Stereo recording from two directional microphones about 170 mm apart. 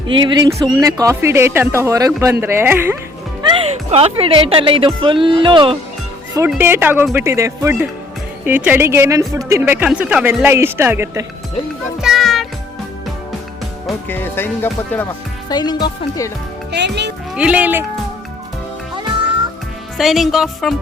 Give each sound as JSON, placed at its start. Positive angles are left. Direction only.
{"t": 0.1, "sound": "speech", "side_deg": -30}
{"t": 3.4, "sound": "speech", "side_deg": -35}
{"t": 6.6, "sound": "speech", "side_deg": -15}
{"t": 12.0, "sound": "music", "side_deg": 0}
{"t": 14.1, "sound": "speech", "side_deg": 10}
{"t": 15.4, "sound": "speech", "side_deg": 25}
{"t": 16.7, "sound": "speech", "side_deg": -85}
{"t": 17.3, "sound": "speech", "side_deg": -5}
{"t": 20.0, "sound": "speech", "side_deg": 0}